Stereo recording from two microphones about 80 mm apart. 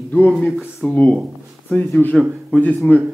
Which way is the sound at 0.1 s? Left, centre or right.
Centre.